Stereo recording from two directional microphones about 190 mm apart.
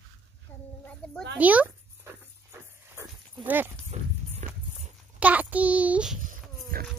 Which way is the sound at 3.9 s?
35° right (ahead or behind).